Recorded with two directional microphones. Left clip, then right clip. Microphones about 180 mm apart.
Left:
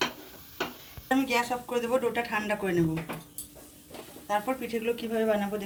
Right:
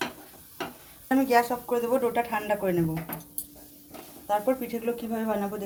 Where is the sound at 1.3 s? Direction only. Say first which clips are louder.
Right 5 dB; 55° right (ahead or behind).